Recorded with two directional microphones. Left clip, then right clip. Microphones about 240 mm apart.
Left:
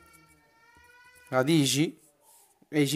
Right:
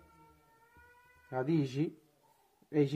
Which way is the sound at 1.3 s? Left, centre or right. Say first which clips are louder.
Left 9 dB; left.